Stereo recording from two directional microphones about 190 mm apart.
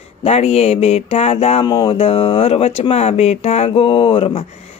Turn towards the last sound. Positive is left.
turn(degrees=30)  # may be behind; listen again after turning